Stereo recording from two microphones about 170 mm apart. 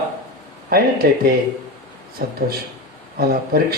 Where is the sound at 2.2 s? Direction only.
60° right (ahead or behind).